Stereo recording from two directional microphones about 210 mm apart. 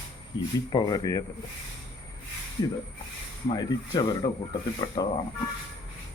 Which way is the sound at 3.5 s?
20° left (ahead or behind).